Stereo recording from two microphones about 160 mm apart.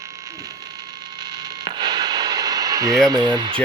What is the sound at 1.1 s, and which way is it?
Radio, 25° right (ahead or behind).